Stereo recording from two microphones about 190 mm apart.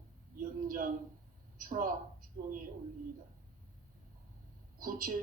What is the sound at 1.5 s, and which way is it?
Speech, 45° right (ahead or behind).